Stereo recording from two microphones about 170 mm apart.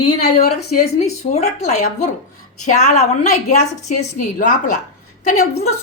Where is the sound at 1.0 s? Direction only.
40° left (ahead or behind).